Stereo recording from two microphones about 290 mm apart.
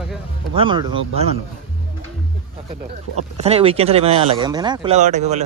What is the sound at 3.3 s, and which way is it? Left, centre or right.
Speech, right.